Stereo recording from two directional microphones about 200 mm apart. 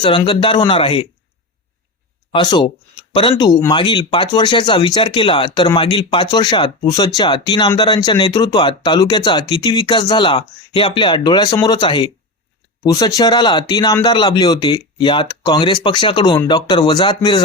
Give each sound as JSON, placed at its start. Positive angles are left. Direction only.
{"t": 0.0, "sound": "speech", "side_deg": 25}
{"t": 2.3, "sound": "speech", "side_deg": 20}